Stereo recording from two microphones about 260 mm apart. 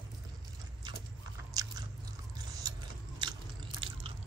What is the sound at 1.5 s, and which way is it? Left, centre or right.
Biting, centre.